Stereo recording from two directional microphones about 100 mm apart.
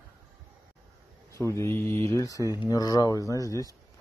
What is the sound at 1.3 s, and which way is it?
Speech, 30° left (ahead or behind).